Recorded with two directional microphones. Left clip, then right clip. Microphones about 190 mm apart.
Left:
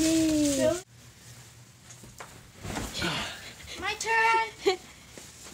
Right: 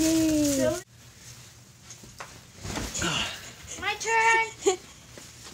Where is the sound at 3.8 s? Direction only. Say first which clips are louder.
Right 2 dB; 60° left (ahead or behind).